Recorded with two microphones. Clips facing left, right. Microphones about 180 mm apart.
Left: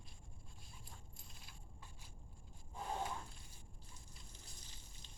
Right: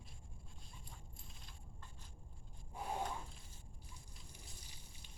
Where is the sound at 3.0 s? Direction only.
5° left (ahead or behind).